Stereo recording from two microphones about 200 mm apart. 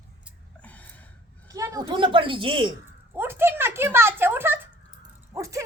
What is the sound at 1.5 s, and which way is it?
Speech, 15° right (ahead or behind).